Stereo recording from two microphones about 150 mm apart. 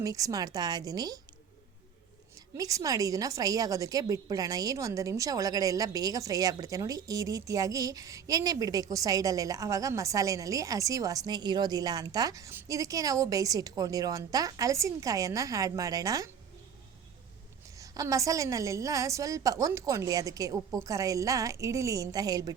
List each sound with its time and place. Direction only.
0.0 s a woman's voice: 25° right (ahead or behind)
2.6 s a woman's voice: 20° right (ahead or behind)
17.7 s a woman's voice: 20° right (ahead or behind)